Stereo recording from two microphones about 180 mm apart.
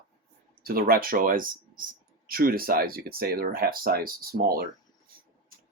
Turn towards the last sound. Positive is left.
turn(degrees=-55)  # may be behind; listen again after turning